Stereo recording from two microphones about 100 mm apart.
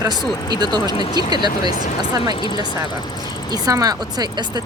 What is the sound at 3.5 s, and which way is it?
Speech, 40° right (ahead or behind).